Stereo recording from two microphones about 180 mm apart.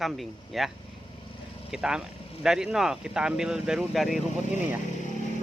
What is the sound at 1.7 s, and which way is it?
A man's voice, 5° right (ahead or behind).